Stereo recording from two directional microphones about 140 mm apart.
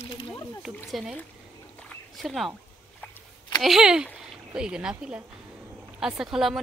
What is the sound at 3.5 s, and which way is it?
Speech, centre (ahead or behind).